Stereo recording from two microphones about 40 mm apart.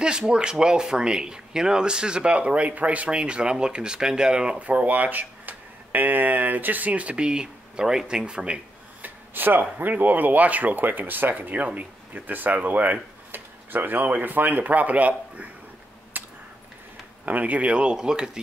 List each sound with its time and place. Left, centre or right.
0.0 s speech: right
3.2 s speech: right
4.6 s speech: right
9.0 s speech: right
13.3 s a sound: right
14.0 s speech: right
16.1 s a sound: right
17.2 s speech: right; by 18.4 s centre